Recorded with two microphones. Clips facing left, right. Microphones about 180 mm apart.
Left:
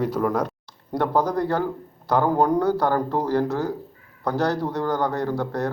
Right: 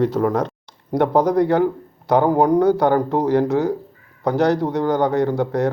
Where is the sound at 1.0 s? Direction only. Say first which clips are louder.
Right 6 dB; 20° right (ahead or behind).